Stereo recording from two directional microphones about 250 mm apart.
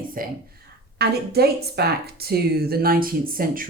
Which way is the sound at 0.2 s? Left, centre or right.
Right.